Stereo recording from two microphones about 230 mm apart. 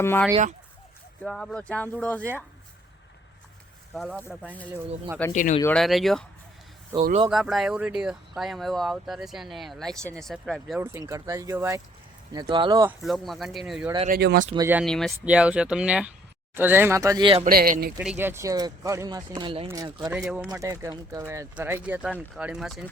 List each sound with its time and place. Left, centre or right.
0.0 s speech: centre
3.9 s speech: centre
5.3 s speech: left
5.6 s speech: centre
7.0 s speech: right
7.3 s speech: centre; by 12.9 s right
13.0 s speech: centre
14.1 s speech: right
14.5 s speech: centre
14.8 s speech: centre
17.4 s speech: right
17.9 s speech: centre